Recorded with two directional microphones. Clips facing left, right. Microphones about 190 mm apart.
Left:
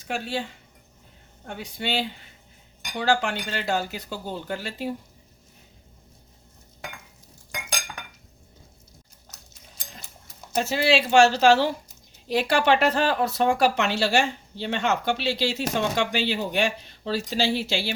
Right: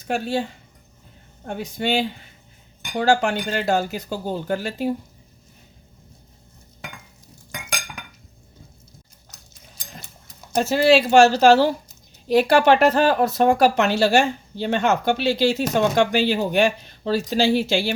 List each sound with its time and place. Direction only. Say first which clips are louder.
0.1 s speech: right 6 dB; 45° right (ahead or behind)
1.5 s speech: right 6 dB; 45° right (ahead or behind)
10.6 s speech: right 6 dB; 40° right (ahead or behind)